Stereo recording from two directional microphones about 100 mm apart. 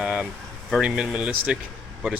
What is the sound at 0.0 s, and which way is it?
Boiling, 10° right (ahead or behind).